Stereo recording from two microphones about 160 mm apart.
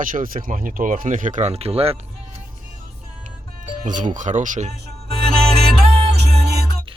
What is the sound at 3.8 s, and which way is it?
Speech, 50° right (ahead or behind).